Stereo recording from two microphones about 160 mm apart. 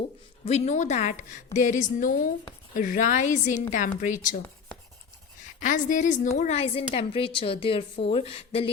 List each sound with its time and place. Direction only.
0.4 s a woman's voice: 45° left (ahead or behind)
5.5 s a woman's voice: 55° left (ahead or behind); by 8.7 s 35° left (ahead or behind)